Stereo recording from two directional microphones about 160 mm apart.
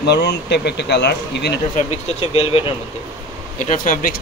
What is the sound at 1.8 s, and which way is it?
Speech, 40° left (ahead or behind).